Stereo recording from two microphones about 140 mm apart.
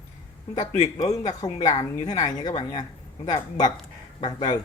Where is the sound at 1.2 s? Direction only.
30° left (ahead or behind).